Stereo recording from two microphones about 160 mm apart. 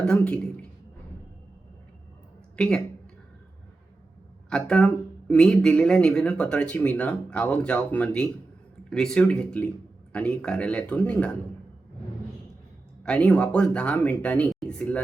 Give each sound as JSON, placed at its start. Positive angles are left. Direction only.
{"t": 0.0, "sound": "speech", "side_deg": 5}
{"t": 2.6, "sound": "speech", "side_deg": 5}
{"t": 4.4, "sound": "speech", "side_deg": 5}
{"t": 13.0, "sound": "speech", "side_deg": 10}